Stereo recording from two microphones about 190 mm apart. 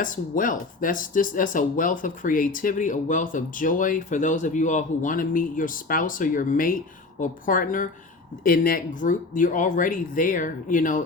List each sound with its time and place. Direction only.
0.0 s speech: 45° left (ahead or behind)